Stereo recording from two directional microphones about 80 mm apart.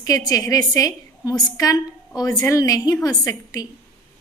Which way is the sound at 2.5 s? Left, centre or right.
Left.